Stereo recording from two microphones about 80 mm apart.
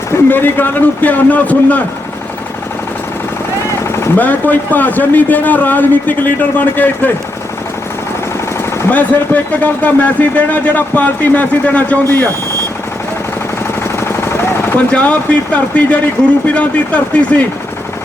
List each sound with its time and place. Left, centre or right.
0.3 s a man's voice: left
3.9 s a sound: left
4.2 s a man's voice: left
8.9 s a man's voice: left
14.7 s speech: centre